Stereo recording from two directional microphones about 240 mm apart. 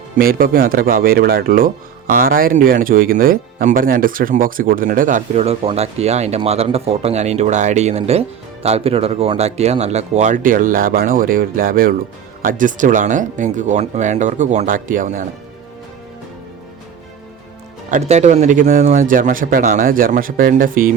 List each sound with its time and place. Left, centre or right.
0.2 s speech: right
17.9 s speech: right